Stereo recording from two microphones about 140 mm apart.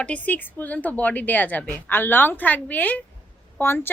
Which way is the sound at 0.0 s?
10° left (ahead or behind).